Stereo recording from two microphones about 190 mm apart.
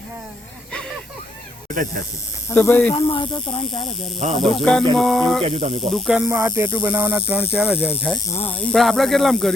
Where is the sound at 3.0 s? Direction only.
25° left (ahead or behind).